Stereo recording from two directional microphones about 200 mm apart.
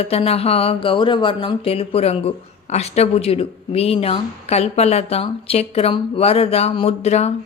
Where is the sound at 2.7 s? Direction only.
30° left (ahead or behind).